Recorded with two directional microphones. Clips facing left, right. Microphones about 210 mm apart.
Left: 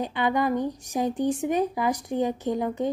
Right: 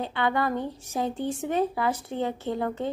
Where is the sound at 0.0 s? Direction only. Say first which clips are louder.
Left 2 dB; 15° left (ahead or behind).